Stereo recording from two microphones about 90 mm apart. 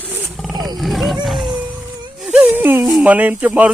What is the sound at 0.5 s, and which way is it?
Roaring cats, 50° right (ahead or behind).